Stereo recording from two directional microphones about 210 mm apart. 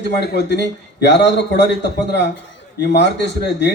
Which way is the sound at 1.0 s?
55° left (ahead or behind).